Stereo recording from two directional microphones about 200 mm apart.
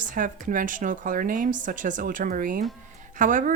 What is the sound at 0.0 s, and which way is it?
Speech, 40° right (ahead or behind).